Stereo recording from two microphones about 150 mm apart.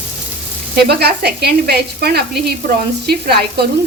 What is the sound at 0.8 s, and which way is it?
Sizzle, 90° right.